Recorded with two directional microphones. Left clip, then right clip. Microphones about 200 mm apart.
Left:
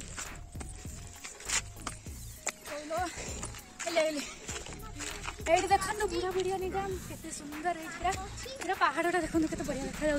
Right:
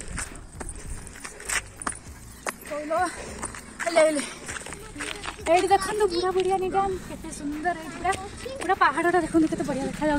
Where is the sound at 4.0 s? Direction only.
35° right (ahead or behind).